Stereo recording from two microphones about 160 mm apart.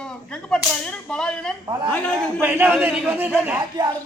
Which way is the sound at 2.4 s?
15° right (ahead or behind).